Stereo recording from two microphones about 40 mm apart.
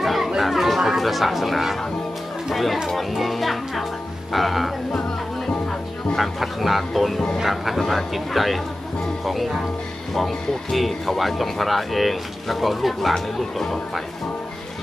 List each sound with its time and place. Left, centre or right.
0.0 s chatter: centre
0.4 s speech: centre
6.1 s speech: centre